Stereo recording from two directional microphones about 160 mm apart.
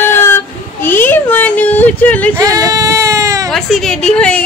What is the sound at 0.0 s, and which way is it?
Child singing, 15° left (ahead or behind).